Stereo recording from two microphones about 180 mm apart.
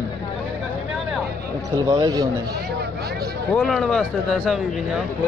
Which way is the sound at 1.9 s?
20° right (ahead or behind).